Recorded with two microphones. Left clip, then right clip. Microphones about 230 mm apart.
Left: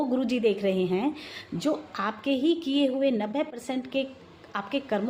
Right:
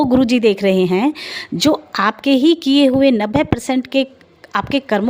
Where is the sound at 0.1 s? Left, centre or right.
Right.